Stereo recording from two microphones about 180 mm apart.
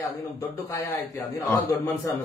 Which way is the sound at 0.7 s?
15° left (ahead or behind).